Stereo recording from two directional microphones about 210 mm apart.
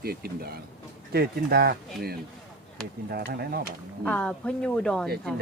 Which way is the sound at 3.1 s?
45° right (ahead or behind).